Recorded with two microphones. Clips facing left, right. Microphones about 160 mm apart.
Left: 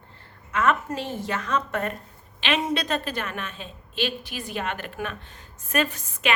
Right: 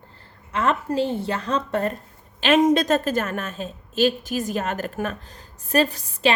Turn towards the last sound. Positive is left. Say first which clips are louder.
# right 6 dB
turn(degrees=-35)  # may be behind; listen again after turning